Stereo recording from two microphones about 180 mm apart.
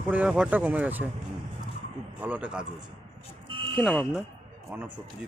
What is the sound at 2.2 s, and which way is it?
Speech, 10° right (ahead or behind).